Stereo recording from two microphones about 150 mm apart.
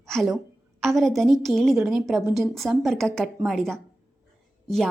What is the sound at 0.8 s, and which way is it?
Speech, centre (ahead or behind).